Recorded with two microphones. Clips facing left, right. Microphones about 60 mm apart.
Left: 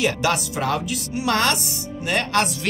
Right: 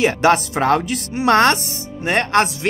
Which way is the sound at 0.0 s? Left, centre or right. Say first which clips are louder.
Right 7 dB; right.